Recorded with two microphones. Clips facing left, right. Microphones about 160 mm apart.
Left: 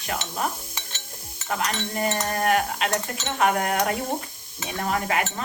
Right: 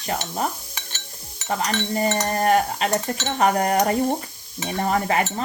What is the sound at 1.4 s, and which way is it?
Speech, 30° right (ahead or behind).